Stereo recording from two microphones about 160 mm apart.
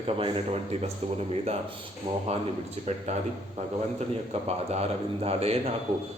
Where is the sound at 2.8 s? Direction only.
45° right (ahead or behind).